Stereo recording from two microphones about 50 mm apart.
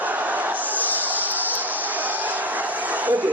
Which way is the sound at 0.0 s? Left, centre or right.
Right.